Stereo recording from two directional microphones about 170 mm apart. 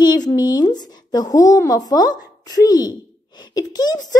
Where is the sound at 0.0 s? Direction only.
25° left (ahead or behind).